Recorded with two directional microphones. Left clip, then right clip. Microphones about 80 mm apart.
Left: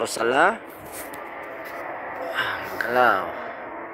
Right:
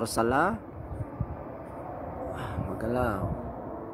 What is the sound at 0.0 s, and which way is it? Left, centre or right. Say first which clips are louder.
Speech: left 6 dB; left.